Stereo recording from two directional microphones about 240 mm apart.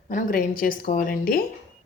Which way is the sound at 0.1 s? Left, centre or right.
Left.